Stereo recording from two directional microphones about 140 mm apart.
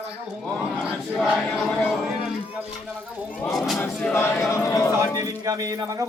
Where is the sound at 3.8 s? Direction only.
15° left (ahead or behind).